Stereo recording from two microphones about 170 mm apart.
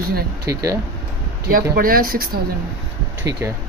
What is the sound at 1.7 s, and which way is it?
Speech, 60° right (ahead or behind).